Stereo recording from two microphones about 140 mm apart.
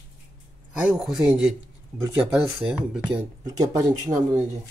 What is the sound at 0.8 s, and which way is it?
Speech, 5° right (ahead or behind).